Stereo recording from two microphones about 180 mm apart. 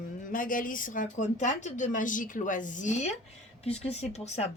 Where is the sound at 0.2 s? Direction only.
50° left (ahead or behind).